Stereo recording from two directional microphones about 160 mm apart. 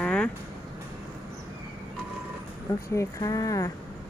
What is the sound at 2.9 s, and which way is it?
Speech, 20° left (ahead or behind).